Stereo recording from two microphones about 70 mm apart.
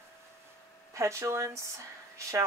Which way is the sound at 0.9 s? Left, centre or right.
Right.